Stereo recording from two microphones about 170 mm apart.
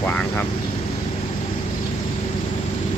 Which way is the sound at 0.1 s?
10° left (ahead or behind).